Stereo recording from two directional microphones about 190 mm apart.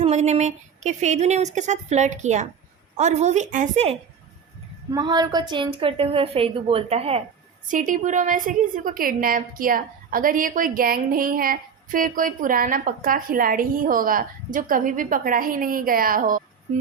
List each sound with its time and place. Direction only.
0.0 s a woman's voice: 35° right (ahead or behind)
4.9 s a woman's voice: 20° right (ahead or behind)
7.7 s a woman's voice: 45° right (ahead or behind)